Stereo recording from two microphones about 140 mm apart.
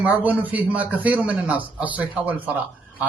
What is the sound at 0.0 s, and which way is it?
A man's voice, 10° right (ahead or behind).